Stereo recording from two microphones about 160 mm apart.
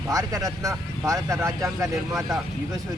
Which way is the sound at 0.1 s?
20° right (ahead or behind).